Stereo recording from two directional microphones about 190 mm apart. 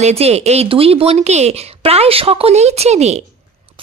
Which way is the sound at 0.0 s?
35° right (ahead or behind).